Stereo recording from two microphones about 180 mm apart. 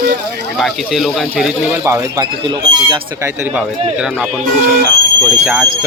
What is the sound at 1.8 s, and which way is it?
Speech, 15° right (ahead or behind).